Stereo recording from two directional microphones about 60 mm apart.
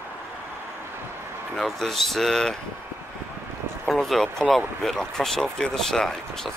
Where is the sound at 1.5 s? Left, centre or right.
Centre.